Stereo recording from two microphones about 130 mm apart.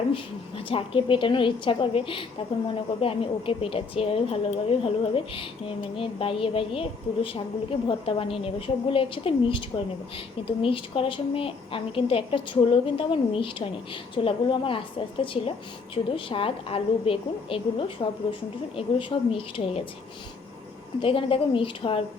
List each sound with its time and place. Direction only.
0.1 s a woman's voice: 45° left (ahead or behind)
21.0 s a woman's voice: 45° left (ahead or behind)